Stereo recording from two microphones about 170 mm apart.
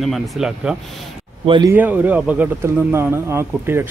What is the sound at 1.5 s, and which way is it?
Speech, 25° right (ahead or behind).